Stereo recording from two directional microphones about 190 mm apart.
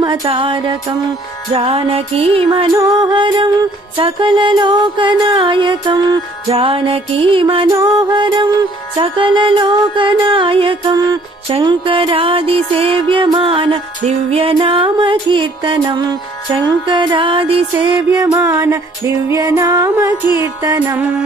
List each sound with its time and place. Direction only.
0.0 s music: 25° right (ahead or behind)
18.1 s music: 15° right (ahead or behind)